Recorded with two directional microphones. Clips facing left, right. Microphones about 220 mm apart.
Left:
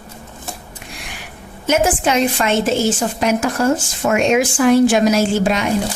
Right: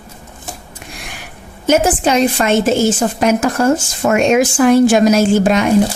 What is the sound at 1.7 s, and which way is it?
Speech, 40° right (ahead or behind).